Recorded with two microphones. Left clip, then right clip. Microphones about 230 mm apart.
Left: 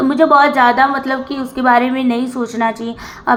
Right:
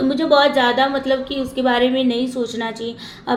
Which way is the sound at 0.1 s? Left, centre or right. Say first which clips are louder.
Left 5 dB; centre.